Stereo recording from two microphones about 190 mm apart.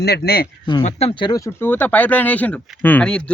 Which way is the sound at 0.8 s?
35° left (ahead or behind).